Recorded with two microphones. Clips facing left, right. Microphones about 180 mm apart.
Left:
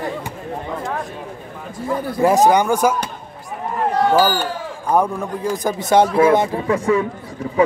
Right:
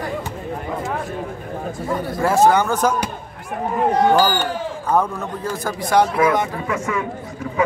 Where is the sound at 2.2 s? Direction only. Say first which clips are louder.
Left 2 dB; 15° left (ahead or behind).